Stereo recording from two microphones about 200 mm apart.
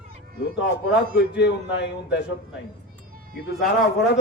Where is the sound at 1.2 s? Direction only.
55° left (ahead or behind).